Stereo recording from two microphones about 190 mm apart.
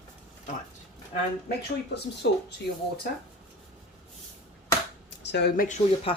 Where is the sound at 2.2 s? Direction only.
70° left (ahead or behind).